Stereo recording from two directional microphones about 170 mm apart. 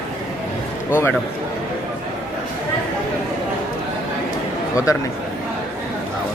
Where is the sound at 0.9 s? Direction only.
15° left (ahead or behind).